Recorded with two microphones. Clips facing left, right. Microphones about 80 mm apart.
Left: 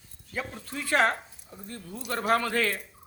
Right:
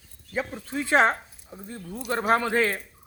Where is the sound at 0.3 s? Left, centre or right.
Right.